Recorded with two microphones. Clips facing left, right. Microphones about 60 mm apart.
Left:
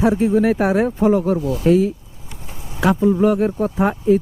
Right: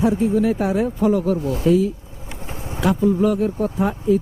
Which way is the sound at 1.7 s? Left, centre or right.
Left.